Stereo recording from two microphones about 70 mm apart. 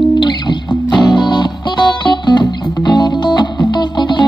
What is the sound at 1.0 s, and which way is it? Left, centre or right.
Music, left.